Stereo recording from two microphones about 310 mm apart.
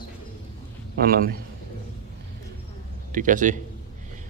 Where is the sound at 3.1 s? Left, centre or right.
Right.